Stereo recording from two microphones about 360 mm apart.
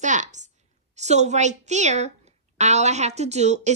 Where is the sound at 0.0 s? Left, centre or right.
Centre.